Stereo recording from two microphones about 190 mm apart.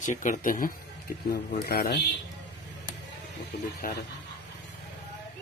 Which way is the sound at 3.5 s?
55° left (ahead or behind).